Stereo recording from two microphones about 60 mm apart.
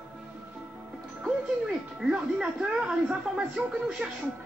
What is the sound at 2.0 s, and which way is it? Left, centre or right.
Speech, centre.